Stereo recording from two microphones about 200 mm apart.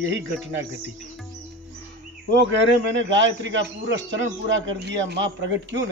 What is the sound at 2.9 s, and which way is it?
A man's voice, 65° right (ahead or behind).